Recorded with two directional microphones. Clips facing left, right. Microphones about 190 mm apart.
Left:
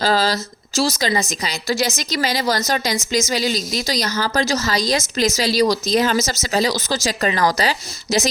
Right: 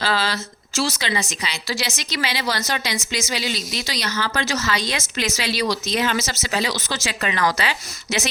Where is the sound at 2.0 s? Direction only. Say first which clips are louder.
Left 5 dB; 40° left (ahead or behind).